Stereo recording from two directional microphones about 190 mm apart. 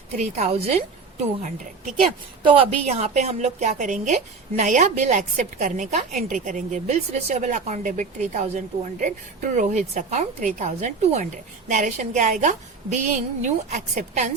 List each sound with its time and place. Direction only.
0.2 s speech: 35° right (ahead or behind)
2.4 s speech: 30° right (ahead or behind)